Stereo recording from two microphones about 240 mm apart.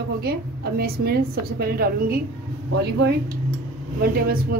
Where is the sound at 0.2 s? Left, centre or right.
Right.